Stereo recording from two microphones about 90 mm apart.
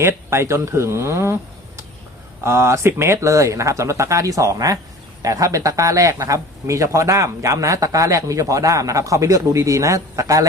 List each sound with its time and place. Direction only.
0.0 s speech: 30° right (ahead or behind)